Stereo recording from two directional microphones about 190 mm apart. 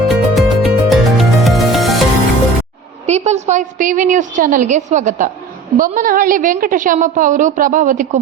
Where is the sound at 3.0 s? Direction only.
35° right (ahead or behind).